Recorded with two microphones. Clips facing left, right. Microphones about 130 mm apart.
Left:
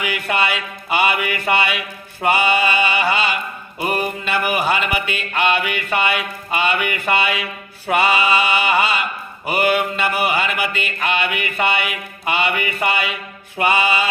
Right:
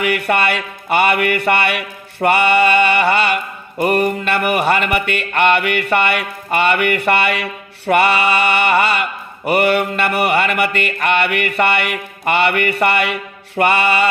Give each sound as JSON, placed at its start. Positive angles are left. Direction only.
{"t": 0.0, "sound": "mantra", "side_deg": -60}